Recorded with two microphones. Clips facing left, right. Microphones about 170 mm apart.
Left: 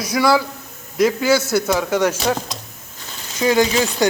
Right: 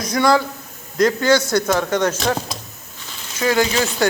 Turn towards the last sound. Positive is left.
turn(degrees=20)  # may be behind; listen again after turning